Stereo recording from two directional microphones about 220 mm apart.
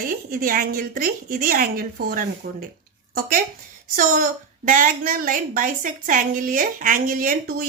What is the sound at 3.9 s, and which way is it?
A woman's voice, 40° right (ahead or behind).